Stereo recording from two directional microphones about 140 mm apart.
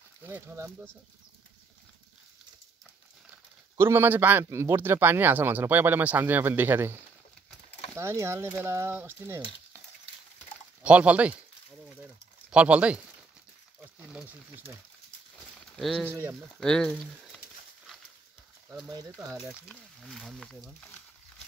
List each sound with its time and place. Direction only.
0.2 s a man's voice: 15° right (ahead or behind)
3.7 s a man's voice: 15° right (ahead or behind)
10.8 s speech: 10° right (ahead or behind)
12.4 s speech: 10° right (ahead or behind)
15.7 s speech: 5° left (ahead or behind)
18.9 s speech: 25° right (ahead or behind)
19.7 s speech: centre (ahead or behind)